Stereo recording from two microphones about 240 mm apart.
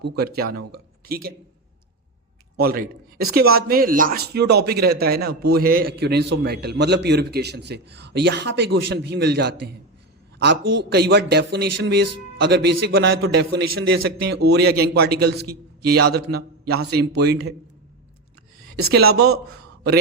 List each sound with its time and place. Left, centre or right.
0.0 s a man's voice: right
2.6 s a man's voice: right
10.6 s a man's voice: right
10.8 s a man's voice: right
18.9 s a man's voice: right